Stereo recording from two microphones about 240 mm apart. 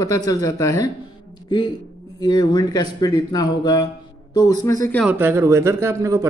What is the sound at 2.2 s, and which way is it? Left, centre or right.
A man's voice, centre.